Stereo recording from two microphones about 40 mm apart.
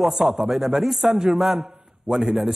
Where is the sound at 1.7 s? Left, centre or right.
Centre.